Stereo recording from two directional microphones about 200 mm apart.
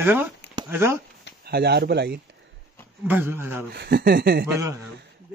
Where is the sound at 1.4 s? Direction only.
55° right (ahead or behind).